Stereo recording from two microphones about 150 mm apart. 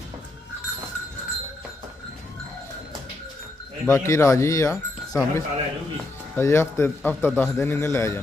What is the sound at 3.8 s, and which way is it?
A man's voice, 20° left (ahead or behind).